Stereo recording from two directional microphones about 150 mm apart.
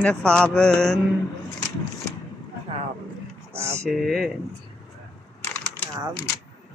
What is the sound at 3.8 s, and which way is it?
Speech, centre (ahead or behind).